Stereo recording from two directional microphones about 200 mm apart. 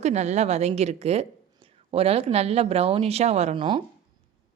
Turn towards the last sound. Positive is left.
turn(degrees=-25)  # may be behind; listen again after turning